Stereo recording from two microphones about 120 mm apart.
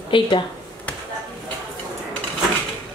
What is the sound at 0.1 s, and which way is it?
Speech, 45° left (ahead or behind).